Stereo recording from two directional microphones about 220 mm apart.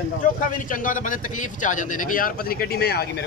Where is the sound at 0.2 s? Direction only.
35° left (ahead or behind).